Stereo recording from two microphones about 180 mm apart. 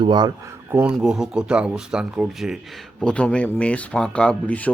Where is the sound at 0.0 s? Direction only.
25° right (ahead or behind).